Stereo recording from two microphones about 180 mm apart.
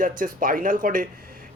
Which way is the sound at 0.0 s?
50° right (ahead or behind).